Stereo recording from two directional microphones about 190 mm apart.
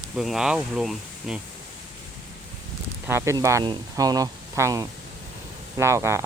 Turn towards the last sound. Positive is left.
turn(degrees=-15)  # may be behind; listen again after turning